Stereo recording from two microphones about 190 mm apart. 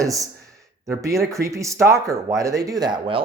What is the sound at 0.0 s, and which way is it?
Speech, 15° right (ahead or behind).